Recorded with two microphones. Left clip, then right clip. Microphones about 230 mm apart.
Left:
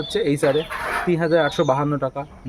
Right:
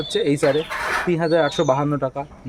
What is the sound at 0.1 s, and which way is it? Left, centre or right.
Speech, centre.